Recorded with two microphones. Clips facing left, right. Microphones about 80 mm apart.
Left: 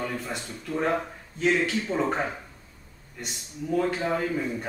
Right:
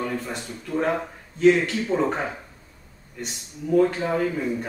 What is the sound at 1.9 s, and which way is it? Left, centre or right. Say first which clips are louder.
Speech: right 3 dB; centre.